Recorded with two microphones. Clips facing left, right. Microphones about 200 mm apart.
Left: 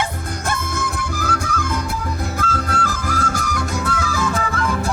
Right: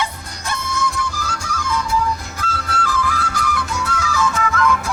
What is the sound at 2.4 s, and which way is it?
Music, 45° left (ahead or behind).